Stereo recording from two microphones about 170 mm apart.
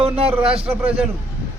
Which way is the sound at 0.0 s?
35° right (ahead or behind).